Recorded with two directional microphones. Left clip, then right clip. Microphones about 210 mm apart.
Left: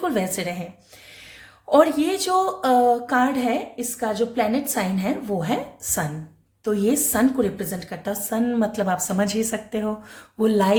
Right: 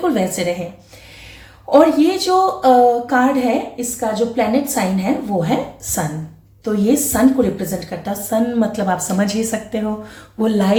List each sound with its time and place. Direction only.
0.0 s a woman's voice: 40° left (ahead or behind)
1.7 s a woman's voice: 45° left (ahead or behind)